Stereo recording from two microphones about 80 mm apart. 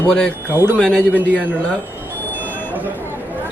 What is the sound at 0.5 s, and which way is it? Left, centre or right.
Speech, right.